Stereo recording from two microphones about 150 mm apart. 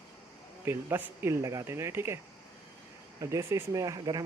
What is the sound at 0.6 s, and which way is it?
Speech, 15° right (ahead or behind).